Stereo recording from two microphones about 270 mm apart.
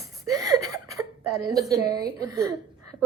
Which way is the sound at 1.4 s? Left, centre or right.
Centre.